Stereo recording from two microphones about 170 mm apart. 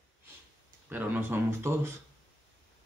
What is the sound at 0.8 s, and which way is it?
Speech, 10° right (ahead or behind).